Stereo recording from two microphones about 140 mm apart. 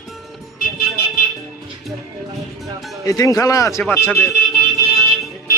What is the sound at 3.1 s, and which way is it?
A man's voice, 25° left (ahead or behind).